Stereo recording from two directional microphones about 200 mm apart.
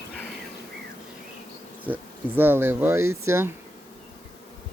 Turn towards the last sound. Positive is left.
turn(degrees=-15)  # may be behind; listen again after turning